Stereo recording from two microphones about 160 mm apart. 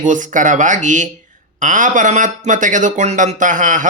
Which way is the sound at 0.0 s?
55° right (ahead or behind).